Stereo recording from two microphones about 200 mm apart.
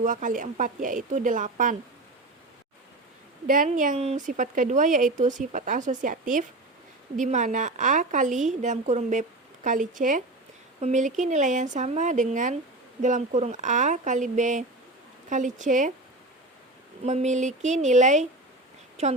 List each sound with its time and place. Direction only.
0.0 s speech: 40° right (ahead or behind)
3.4 s speech: 40° right (ahead or behind)
17.0 s speech: 35° right (ahead or behind)